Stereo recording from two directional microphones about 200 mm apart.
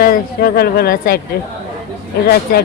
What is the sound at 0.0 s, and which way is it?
Speech, 45° left (ahead or behind).